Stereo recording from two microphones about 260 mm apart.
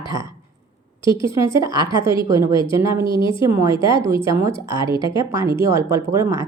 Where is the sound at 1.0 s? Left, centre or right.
Centre.